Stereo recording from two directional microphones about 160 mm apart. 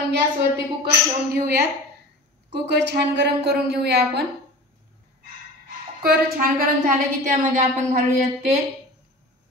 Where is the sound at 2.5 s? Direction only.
90° right.